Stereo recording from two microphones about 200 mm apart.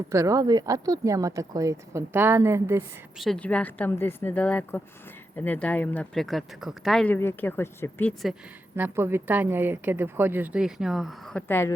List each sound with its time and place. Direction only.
0.1 s a woman's voice: 15° right (ahead or behind)
3.2 s speech: 5° left (ahead or behind)
8.7 s a woman's voice: 10° right (ahead or behind); by 11.7 s 10° left (ahead or behind)